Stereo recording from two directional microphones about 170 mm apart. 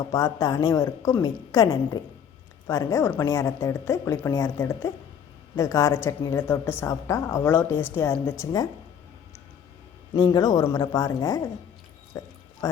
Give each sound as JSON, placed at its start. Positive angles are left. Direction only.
{"t": 0.1, "sound": "a woman's voice", "side_deg": 20}
{"t": 10.2, "sound": "a woman's voice", "side_deg": 25}
{"t": 12.1, "sound": "music", "side_deg": 15}